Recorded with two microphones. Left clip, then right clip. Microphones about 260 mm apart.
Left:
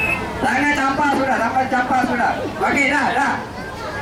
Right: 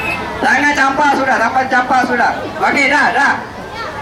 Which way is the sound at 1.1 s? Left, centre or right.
Centre.